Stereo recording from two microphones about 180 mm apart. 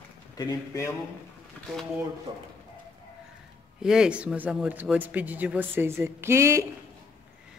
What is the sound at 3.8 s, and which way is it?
Speech, 5° right (ahead or behind).